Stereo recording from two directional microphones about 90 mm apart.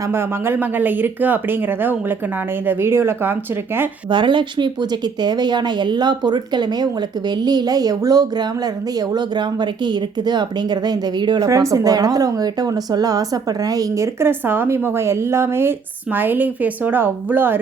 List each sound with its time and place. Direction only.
0.0 s speech: 25° right (ahead or behind)
4.1 s a woman's voice: 60° right (ahead or behind)
11.3 s speech: 40° right (ahead or behind); by 17.6 s 20° right (ahead or behind)